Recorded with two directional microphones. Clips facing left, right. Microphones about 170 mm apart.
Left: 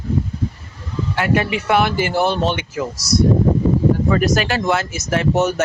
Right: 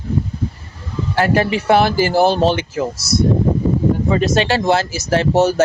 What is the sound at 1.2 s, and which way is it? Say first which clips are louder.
Speech: right 3 dB; 35° right (ahead or behind).